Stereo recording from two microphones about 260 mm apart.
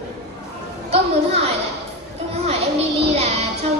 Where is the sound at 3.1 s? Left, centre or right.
Right.